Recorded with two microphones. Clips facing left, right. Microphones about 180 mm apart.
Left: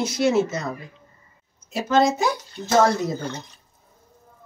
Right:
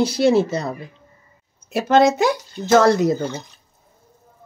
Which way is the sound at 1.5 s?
60° right (ahead or behind).